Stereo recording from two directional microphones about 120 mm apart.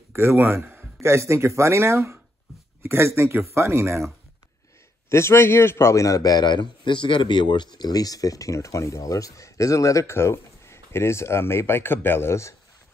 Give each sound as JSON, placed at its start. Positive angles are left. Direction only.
{"t": 0.1, "sound": "speech", "side_deg": -20}
{"t": 5.1, "sound": "a man's voice", "side_deg": 20}